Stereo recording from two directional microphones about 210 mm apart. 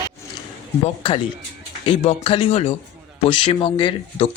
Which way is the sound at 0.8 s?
25° left (ahead or behind).